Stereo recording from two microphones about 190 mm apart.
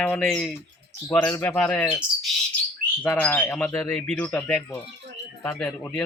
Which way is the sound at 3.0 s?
10° left (ahead or behind).